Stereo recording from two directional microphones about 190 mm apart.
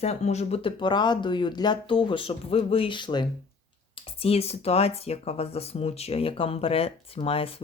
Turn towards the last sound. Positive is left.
turn(degrees=30)  # may be behind; listen again after turning